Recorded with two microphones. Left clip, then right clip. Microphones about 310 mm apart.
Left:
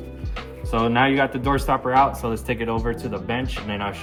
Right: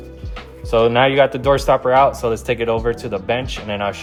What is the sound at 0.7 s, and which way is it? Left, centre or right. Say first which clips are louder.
Speech: right 6 dB; right.